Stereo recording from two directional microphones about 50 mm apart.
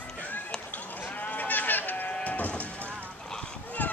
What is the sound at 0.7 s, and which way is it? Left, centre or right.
Sheep, left.